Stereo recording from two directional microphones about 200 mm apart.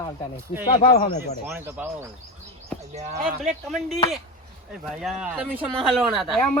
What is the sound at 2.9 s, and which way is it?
Speech, 35° right (ahead or behind).